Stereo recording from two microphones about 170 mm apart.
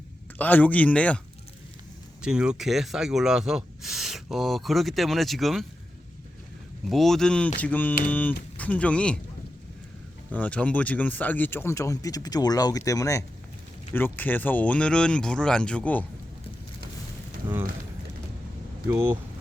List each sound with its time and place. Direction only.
0.3 s speech: 10° left (ahead or behind)
2.2 s speech: 5° right (ahead or behind)
6.9 s speech: centre (ahead or behind)
10.3 s speech: 10° left (ahead or behind)